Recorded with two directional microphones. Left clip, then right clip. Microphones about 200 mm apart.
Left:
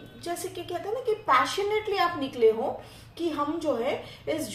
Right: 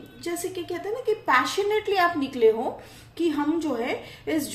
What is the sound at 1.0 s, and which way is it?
A woman's voice, 40° right (ahead or behind).